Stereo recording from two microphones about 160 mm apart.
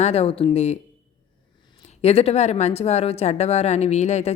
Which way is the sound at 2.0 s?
40° left (ahead or behind).